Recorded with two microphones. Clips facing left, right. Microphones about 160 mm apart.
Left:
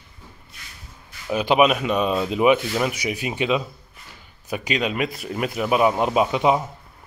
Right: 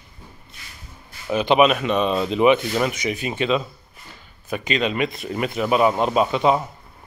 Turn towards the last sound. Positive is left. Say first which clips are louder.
# right 1 dB
turn(degrees=10)  # may be behind; listen again after turning